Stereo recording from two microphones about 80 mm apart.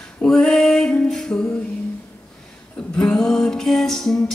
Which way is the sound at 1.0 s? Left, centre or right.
Centre.